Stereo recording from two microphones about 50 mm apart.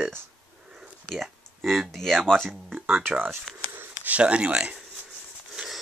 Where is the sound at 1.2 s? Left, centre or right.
Centre.